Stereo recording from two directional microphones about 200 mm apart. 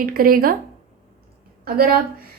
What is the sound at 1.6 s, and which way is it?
Speech, 50° right (ahead or behind).